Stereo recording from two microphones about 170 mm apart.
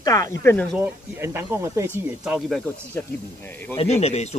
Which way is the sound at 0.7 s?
10° right (ahead or behind).